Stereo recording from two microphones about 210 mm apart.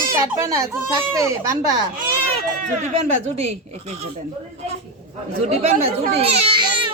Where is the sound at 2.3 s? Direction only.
30° right (ahead or behind).